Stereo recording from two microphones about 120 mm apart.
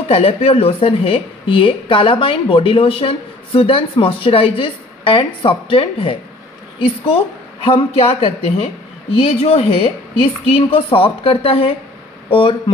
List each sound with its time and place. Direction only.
0.1 s a woman's voice: 55° left (ahead or behind)
7.6 s a woman's voice: 55° left (ahead or behind)